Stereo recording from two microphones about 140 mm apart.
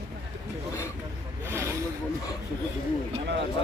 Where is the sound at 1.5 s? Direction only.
20° right (ahead or behind).